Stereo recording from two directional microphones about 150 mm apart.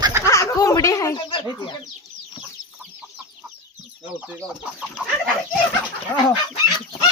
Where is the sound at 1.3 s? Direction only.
35° left (ahead or behind).